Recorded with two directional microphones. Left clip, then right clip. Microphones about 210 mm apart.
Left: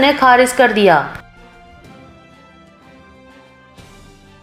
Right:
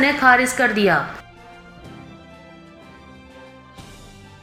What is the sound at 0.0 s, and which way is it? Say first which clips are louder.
Speech: left 4 dB; 20° left (ahead or behind).